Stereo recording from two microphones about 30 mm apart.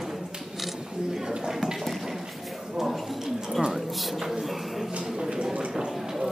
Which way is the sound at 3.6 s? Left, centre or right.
Centre.